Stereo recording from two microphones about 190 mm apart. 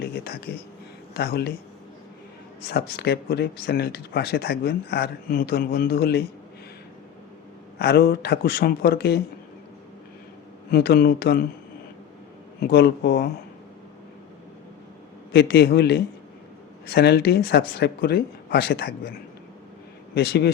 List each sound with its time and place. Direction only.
0.0 s a sound: 55° left (ahead or behind)
1.1 s speech: 55° left (ahead or behind)
2.9 s speech: 60° left (ahead or behind)
7.8 s speech: 55° left (ahead or behind)
10.7 s speech: 55° left (ahead or behind)
12.5 s speech: 55° left (ahead or behind)
15.3 s speech: 60° left (ahead or behind)
20.1 s speech: 60° left (ahead or behind)